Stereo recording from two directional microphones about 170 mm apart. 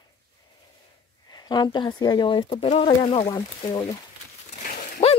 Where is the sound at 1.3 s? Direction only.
25° left (ahead or behind).